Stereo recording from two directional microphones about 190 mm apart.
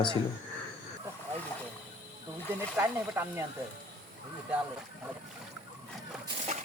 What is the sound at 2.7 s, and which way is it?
Speech, 10° right (ahead or behind).